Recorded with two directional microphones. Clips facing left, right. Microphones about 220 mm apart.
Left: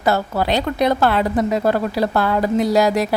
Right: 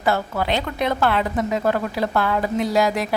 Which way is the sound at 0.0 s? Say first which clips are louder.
Left 3 dB; 40° left (ahead or behind).